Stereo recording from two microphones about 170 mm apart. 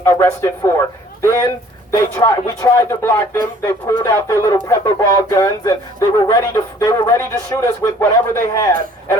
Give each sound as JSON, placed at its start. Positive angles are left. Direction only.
{"t": 0.0, "sound": "speech", "side_deg": 15}